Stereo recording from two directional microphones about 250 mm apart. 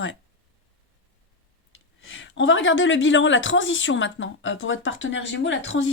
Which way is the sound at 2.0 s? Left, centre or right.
Left.